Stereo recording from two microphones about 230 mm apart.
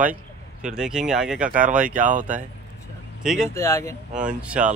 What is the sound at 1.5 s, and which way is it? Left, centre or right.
Speech, right.